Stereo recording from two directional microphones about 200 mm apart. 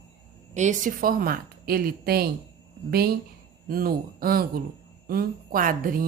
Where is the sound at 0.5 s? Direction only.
35° right (ahead or behind).